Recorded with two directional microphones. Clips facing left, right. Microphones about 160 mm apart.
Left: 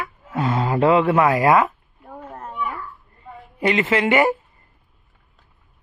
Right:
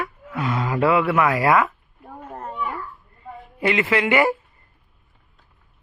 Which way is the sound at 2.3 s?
Centre (ahead or behind).